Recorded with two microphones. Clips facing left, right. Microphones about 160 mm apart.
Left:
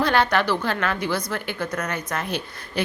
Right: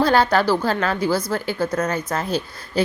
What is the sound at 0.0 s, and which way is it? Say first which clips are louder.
A woman's voice: right 4 dB; 35° right (ahead or behind).